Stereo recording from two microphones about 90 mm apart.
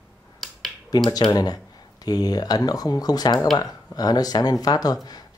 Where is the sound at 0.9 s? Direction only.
45° left (ahead or behind).